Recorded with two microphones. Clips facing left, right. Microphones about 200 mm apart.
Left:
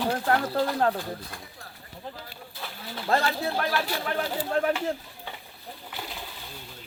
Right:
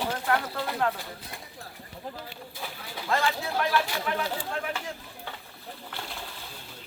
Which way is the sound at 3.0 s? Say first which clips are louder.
Left 2 dB; 40° left (ahead or behind).